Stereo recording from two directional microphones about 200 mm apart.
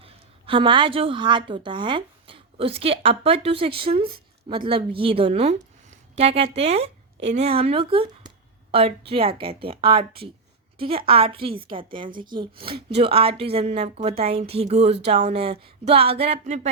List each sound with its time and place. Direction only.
0.0 s a woman's voice: 25° right (ahead or behind)